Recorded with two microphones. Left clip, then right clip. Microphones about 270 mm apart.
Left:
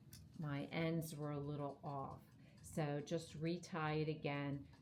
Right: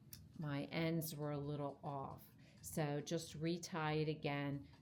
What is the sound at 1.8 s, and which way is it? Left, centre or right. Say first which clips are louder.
Speech: right 1 dB; right.